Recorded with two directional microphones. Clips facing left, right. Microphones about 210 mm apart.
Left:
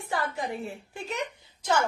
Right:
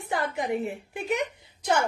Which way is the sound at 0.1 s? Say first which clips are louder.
Right 4 dB; 20° right (ahead or behind).